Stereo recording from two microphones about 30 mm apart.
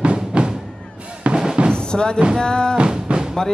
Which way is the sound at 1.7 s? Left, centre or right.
Left.